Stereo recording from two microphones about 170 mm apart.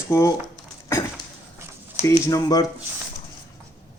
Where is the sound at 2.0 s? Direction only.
20° left (ahead or behind).